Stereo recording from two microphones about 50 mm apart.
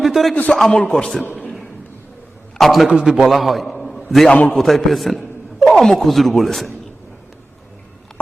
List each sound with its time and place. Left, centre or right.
0.0 s a sound: centre
0.5 s speech: centre
2.6 s speech: centre
2.9 s a man's voice: centre
3.2 s a man's voice: centre
4.3 s a man's voice: left
4.5 s speech: centre
5.5 s a sound: centre
5.8 s speech: centre